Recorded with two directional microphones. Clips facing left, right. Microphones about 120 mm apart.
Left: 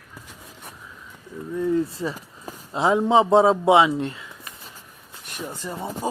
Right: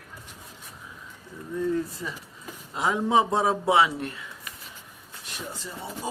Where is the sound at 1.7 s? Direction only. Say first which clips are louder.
Left 6 dB; 35° left (ahead or behind).